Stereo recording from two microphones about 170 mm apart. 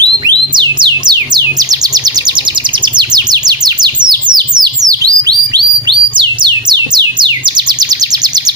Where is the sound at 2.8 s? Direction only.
25° right (ahead or behind).